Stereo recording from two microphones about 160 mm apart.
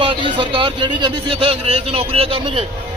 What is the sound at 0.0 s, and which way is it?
Speech, 35° right (ahead or behind).